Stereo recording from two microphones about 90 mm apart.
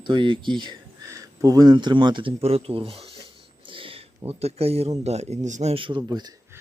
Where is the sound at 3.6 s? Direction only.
80° right.